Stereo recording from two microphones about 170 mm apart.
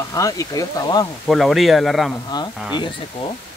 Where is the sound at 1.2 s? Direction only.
Centre (ahead or behind).